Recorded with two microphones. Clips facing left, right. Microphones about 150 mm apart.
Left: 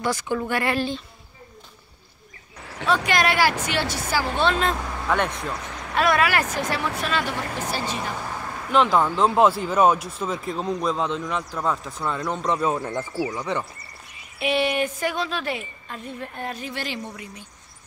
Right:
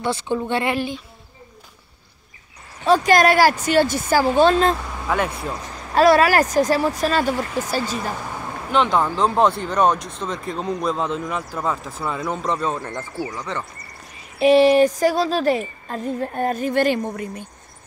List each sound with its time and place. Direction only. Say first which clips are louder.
0.0 s speech: right 2 dB; 25° right (ahead or behind)
2.9 s a woman's voice: right 7 dB; 40° right (ahead or behind)
5.0 s speech: right 1 dB; 5° right (ahead or behind)
5.9 s a woman's voice: right 7 dB; 35° right (ahead or behind)
8.7 s speech: even; centre (ahead or behind)
12.5 s speech: left 1 dB; 10° left (ahead or behind)
14.4 s a woman's voice: right 10 dB; 35° right (ahead or behind)